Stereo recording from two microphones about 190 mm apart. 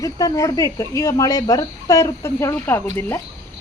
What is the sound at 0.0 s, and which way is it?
Speech, 20° left (ahead or behind).